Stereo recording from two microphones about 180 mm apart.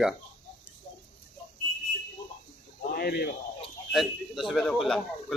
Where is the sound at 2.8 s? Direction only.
55° left (ahead or behind).